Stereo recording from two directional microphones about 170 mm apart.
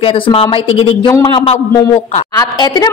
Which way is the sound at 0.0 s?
35° left (ahead or behind).